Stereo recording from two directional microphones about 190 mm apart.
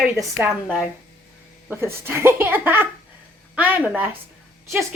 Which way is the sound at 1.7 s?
10° right (ahead or behind).